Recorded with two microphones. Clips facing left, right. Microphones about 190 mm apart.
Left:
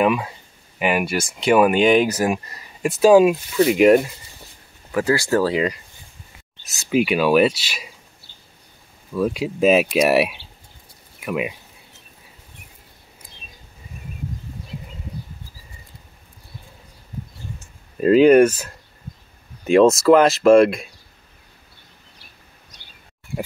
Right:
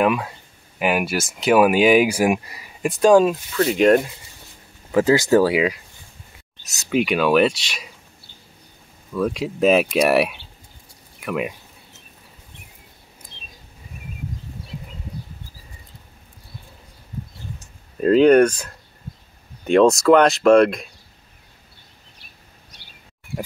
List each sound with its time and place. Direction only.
0.0 s speech: centre (ahead or behind)
4.9 s speech: 20° right (ahead or behind)
6.7 s speech: 5° left (ahead or behind)
9.1 s speech: 5° left (ahead or behind)
18.0 s speech: 5° left (ahead or behind)